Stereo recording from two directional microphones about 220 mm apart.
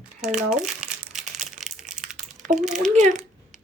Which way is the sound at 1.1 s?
35° right (ahead or behind).